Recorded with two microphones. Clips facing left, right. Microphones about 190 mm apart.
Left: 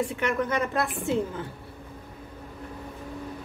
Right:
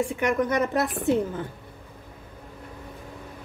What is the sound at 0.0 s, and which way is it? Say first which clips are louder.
A woman's voice: right 3 dB; 15° right (ahead or behind).